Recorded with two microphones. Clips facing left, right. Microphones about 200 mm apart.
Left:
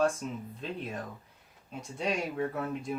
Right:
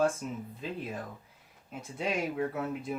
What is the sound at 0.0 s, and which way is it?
Speech, centre (ahead or behind).